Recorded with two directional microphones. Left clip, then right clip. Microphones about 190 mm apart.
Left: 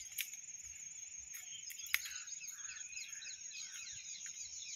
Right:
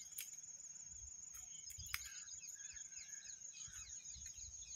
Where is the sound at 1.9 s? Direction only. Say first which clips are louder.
Left 10 dB; 60° right (ahead or behind).